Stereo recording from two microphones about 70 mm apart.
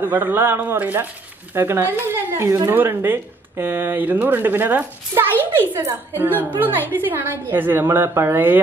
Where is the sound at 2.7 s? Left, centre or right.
Right.